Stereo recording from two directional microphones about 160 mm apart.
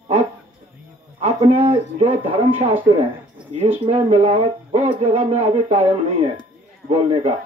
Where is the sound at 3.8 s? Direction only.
40° right (ahead or behind).